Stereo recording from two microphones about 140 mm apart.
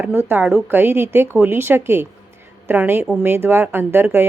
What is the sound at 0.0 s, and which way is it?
Speech, 15° right (ahead or behind).